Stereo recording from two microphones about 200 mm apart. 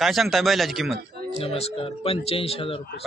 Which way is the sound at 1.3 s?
30° left (ahead or behind).